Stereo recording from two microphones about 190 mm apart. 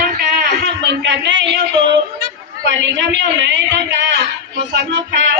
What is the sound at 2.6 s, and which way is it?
Speech, 70° right (ahead or behind).